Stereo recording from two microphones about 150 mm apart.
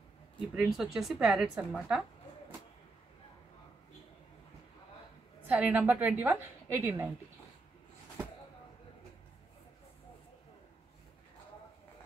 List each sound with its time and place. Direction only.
0.6 s a woman's voice: 5° right (ahead or behind)
5.5 s a woman's voice: 10° right (ahead or behind)